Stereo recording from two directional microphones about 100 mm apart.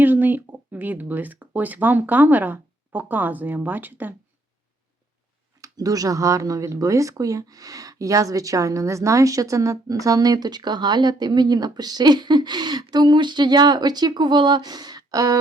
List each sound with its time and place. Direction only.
0.0 s speech: 20° right (ahead or behind)
5.5 s speech: 35° right (ahead or behind)